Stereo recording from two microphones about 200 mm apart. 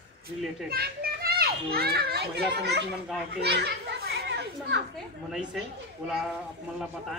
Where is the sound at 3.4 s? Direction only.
55° right (ahead or behind).